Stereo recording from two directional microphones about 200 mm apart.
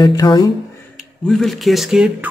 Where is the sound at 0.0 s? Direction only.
20° left (ahead or behind).